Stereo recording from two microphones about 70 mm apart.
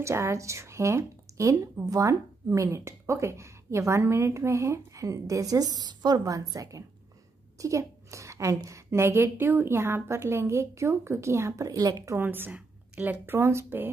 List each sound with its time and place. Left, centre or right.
0.0 s speech: right
6.4 s a woman's voice: right
12.2 s a woman's voice: right